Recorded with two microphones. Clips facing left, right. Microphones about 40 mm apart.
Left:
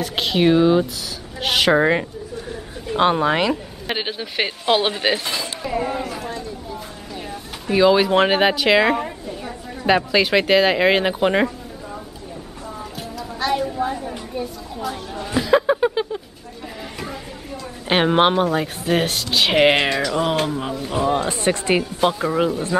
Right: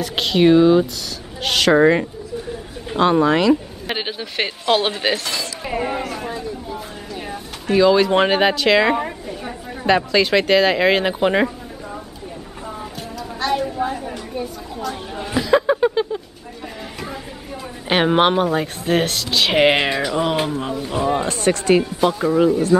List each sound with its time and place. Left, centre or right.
0.0 s speech: centre
3.0 s speech: centre
3.8 s speech: centre
5.6 s speech: right
6.2 s a sound: centre
7.7 s speech: centre
13.4 s speech: centre
15.3 s a sound: centre
17.8 s speech: centre
21.3 s speech: centre